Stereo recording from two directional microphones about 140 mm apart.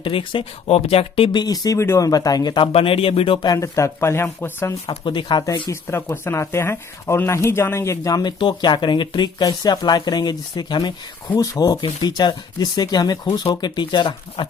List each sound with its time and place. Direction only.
0.0 s speech: 40° left (ahead or behind)
2.7 s speech: 40° left (ahead or behind); by 4.8 s 15° left (ahead or behind)
4.9 s speech: 35° left (ahead or behind)